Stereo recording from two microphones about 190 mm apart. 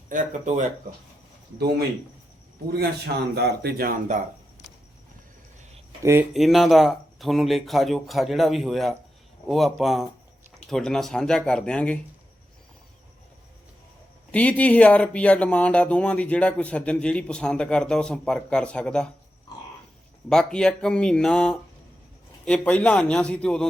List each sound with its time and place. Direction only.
0.1 s speech: 40° right (ahead or behind)
3.3 s speech: 60° right (ahead or behind)
6.0 s speech: 15° right (ahead or behind)
6.3 s speech: centre (ahead or behind)
14.3 s speech: 5° left (ahead or behind)
20.3 s speech: 5° left (ahead or behind)